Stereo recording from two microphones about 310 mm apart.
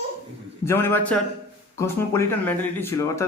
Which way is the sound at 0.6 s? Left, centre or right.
Centre.